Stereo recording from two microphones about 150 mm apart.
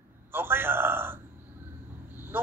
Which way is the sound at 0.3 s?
15° right (ahead or behind).